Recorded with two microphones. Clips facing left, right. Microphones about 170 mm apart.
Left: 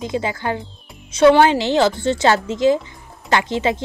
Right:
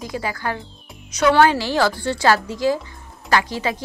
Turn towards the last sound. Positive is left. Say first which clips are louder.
# left 2 dB
turn(degrees=25)  # may be behind; listen again after turning